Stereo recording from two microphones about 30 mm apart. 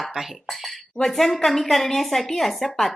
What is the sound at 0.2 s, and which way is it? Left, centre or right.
Speech, centre.